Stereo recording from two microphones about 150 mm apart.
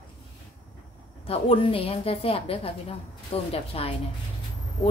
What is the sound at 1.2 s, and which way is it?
A woman's voice, 35° left (ahead or behind).